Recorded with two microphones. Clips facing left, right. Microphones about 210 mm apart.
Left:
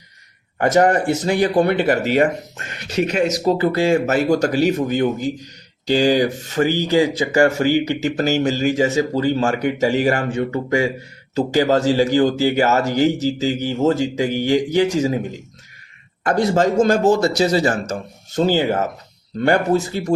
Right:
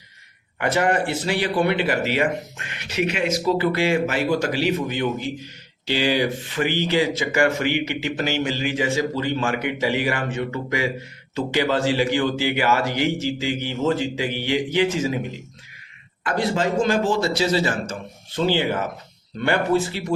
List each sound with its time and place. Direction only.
0.6 s a man's voice: 45° left (ahead or behind)
16.4 s speech: 45° left (ahead or behind)